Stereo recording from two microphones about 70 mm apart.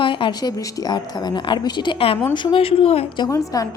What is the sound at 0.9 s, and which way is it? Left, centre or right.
Speech, left.